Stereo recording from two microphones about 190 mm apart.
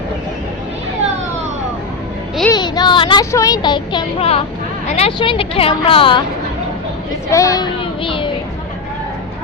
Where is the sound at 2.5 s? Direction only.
20° left (ahead or behind).